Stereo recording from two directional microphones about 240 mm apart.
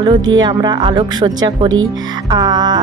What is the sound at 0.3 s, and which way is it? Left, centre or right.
Music, centre.